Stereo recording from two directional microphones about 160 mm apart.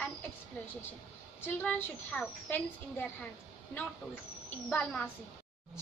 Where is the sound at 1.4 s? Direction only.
10° left (ahead or behind).